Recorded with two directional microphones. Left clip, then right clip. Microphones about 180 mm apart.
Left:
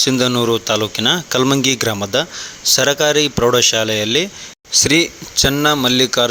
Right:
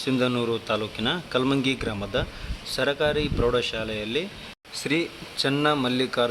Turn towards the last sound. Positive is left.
turn(degrees=25)  # may be behind; listen again after turning